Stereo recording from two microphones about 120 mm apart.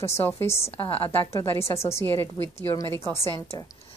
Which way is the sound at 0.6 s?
55° left (ahead or behind).